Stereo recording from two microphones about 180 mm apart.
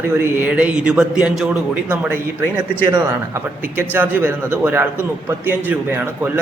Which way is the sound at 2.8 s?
25° right (ahead or behind).